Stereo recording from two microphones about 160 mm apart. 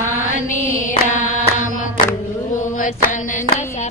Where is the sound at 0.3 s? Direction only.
55° left (ahead or behind).